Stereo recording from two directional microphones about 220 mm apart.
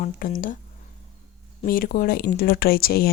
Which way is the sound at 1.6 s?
40° left (ahead or behind).